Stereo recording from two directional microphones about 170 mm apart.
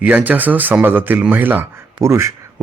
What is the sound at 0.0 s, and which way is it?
Speech, 10° right (ahead or behind).